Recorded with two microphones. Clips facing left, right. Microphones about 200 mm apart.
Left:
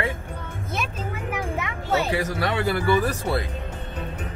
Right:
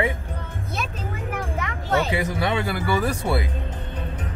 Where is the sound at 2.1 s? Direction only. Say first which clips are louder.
Right 1 dB; 15° right (ahead or behind).